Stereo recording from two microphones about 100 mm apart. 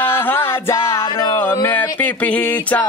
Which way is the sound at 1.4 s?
20° left (ahead or behind).